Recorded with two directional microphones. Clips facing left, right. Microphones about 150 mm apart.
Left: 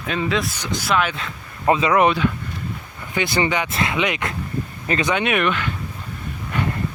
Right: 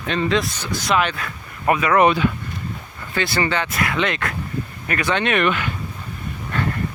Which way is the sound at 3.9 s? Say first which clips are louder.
Right 1 dB; 10° left (ahead or behind).